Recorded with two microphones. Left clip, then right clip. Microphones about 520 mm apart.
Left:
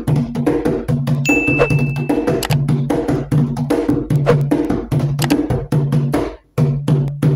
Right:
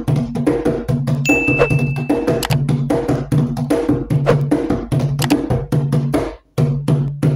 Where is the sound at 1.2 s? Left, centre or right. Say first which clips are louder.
Even; centre.